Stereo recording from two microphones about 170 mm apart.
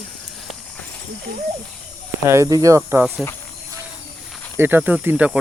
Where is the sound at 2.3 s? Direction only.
20° right (ahead or behind).